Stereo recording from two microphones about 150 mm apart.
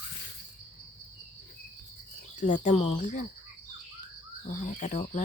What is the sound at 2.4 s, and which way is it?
Speech, 55° left (ahead or behind).